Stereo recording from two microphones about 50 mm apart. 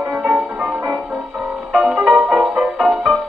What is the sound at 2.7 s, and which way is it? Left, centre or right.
Music, centre.